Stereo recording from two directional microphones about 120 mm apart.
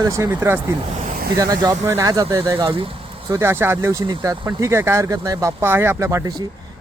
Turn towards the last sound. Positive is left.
turn(degrees=-30)  # may be behind; listen again after turning